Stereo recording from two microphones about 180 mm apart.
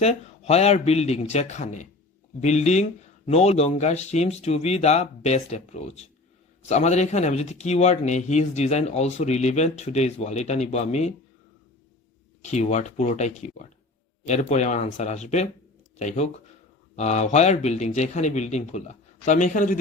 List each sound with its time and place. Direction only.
0.0 s speech: 35° left (ahead or behind)
12.4 s speech: 40° left (ahead or behind)